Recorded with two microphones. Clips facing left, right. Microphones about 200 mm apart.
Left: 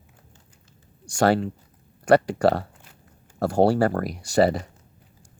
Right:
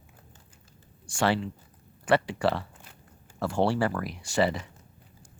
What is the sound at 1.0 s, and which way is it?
Speech, 40° left (ahead or behind).